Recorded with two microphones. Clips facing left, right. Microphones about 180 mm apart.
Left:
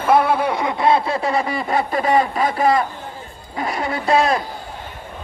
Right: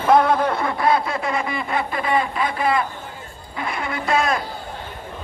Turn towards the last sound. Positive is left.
turn(degrees=35)  # may be behind; listen again after turning